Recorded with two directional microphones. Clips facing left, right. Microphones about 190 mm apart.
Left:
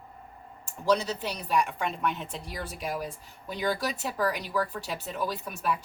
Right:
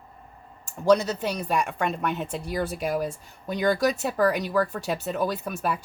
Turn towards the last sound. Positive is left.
turn(degrees=-50)  # may be behind; listen again after turning